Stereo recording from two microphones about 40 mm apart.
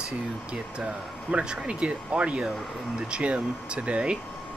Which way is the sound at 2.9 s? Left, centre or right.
Right.